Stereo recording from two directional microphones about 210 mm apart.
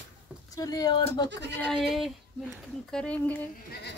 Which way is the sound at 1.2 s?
55° right (ahead or behind).